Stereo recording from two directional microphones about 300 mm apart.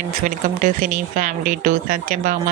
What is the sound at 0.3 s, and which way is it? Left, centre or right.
Speech, right.